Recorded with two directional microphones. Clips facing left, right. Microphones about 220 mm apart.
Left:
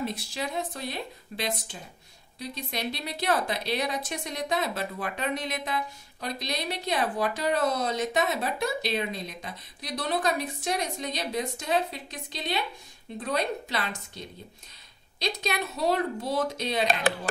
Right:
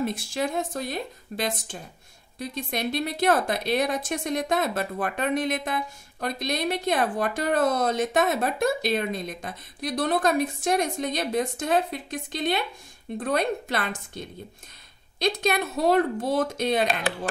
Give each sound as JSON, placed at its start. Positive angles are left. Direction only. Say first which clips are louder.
{"t": 0.0, "sound": "a woman's voice", "louder": "right 5 dB", "side_deg": -50}